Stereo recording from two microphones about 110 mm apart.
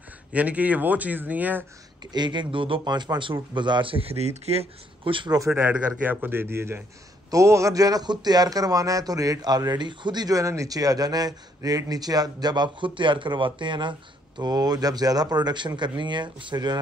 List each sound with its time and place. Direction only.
0.3 s speech: 15° right (ahead or behind)
2.1 s a man's voice: 45° right (ahead or behind)
5.6 s a man's voice: 15° right (ahead or behind); by 16.8 s 40° right (ahead or behind)